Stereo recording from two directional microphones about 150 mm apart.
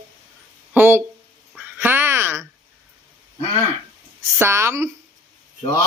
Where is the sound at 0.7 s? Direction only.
15° right (ahead or behind).